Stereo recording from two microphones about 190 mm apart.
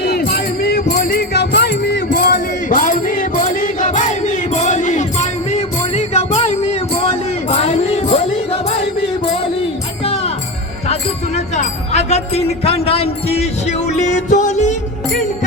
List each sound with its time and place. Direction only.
0.0 s music: 55° left (ahead or behind); by 8.3 s 35° left (ahead or behind)
10.0 s music: 30° left (ahead or behind)
11.3 s a sound: 35° left (ahead or behind)